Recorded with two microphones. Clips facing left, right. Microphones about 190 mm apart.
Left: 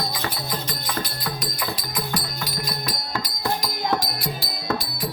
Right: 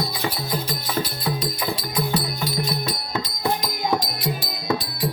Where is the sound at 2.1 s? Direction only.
25° right (ahead or behind).